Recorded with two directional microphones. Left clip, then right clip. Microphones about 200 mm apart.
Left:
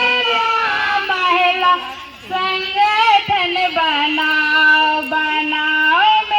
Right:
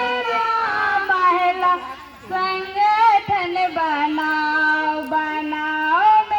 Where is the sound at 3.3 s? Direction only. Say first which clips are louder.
Left 4 dB; 20° left (ahead or behind).